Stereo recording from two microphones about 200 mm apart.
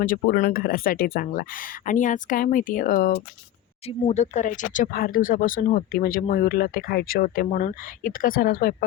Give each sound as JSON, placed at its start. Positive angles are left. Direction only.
{"t": 0.0, "sound": "speech", "side_deg": 45}
{"t": 3.8, "sound": "speech", "side_deg": 30}